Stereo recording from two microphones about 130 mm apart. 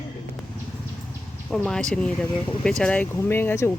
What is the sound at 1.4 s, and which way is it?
Speech, 5° left (ahead or behind).